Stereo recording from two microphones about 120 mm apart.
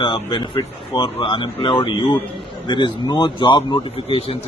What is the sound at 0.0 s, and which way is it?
Speech, 40° left (ahead or behind).